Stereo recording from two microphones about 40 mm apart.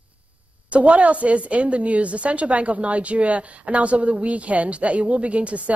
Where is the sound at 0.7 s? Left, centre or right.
Right.